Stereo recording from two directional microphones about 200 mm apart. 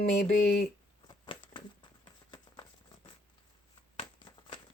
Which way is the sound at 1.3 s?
25° left (ahead or behind).